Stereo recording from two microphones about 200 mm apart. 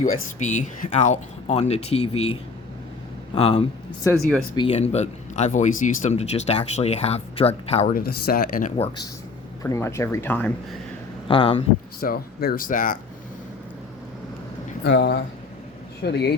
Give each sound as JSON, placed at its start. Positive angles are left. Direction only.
{"t": 0.0, "sound": "speech", "side_deg": 40}
{"t": 3.3, "sound": "a man's voice", "side_deg": 30}
{"t": 7.9, "sound": "speech", "side_deg": 45}
{"t": 9.6, "sound": "speech", "side_deg": 15}
{"t": 11.3, "sound": "a man's voice", "side_deg": 25}
{"t": 11.9, "sound": "speech", "side_deg": 45}
{"t": 14.8, "sound": "speech", "side_deg": 55}